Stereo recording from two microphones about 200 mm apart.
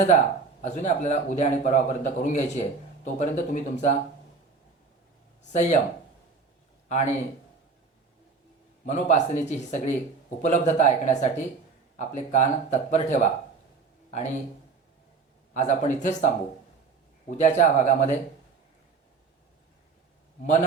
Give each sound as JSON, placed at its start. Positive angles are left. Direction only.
{"t": 0.6, "sound": "a man's voice", "side_deg": 35}
{"t": 5.4, "sound": "speech", "side_deg": 35}
{"t": 6.8, "sound": "a man's voice", "side_deg": 35}
{"t": 8.9, "sound": "a man's voice", "side_deg": 35}
{"t": 15.5, "sound": "a man's voice", "side_deg": 35}